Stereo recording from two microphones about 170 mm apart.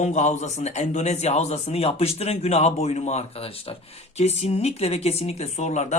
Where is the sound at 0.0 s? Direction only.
45° left (ahead or behind).